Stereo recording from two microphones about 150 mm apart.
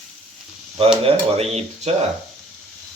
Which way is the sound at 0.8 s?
40° right (ahead or behind).